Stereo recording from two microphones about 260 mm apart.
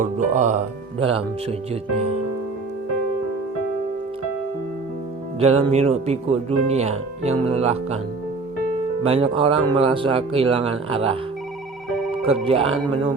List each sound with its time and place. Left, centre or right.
0.0 s speech: right
5.4 s speech: right
9.0 s speech: right
12.2 s speech: right